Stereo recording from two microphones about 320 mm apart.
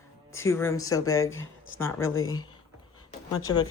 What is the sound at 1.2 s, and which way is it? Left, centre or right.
Speech, left.